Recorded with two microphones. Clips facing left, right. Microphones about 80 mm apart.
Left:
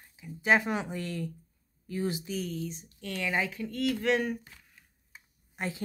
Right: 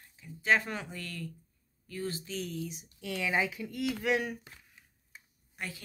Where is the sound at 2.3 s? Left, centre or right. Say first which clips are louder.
Left 3 dB; centre.